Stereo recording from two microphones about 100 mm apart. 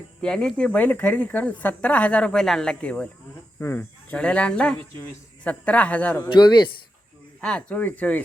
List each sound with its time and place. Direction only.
0.2 s speech: 10° left (ahead or behind)
6.2 s a man's voice: 50° left (ahead or behind)
7.4 s speech: 10° left (ahead or behind)